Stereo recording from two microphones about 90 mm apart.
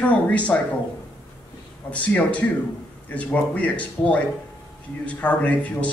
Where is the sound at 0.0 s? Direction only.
15° left (ahead or behind).